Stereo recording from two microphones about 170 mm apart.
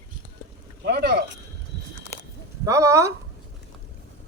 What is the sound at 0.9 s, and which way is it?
Speech, 70° right (ahead or behind).